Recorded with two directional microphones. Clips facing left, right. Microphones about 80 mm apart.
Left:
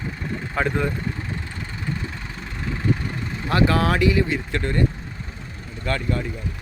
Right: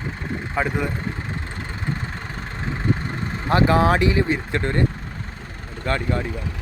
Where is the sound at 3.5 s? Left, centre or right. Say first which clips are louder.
Right 3 dB; right.